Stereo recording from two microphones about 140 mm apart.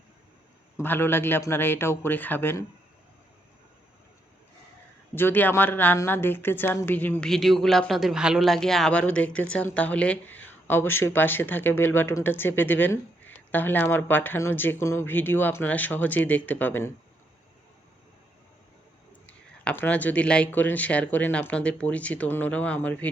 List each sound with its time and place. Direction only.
0.8 s a man's voice: 15° left (ahead or behind)
5.1 s a man's voice: 15° left (ahead or behind)
7.3 s a man's voice: centre (ahead or behind)
19.3 s a man's voice: 10° left (ahead or behind)